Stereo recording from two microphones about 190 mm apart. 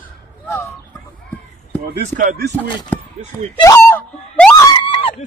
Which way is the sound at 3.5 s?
15° left (ahead or behind).